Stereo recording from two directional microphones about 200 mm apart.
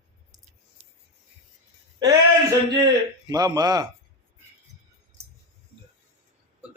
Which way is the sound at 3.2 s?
20° right (ahead or behind).